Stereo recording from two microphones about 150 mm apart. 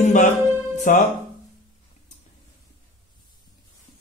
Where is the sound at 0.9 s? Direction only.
60° left (ahead or behind).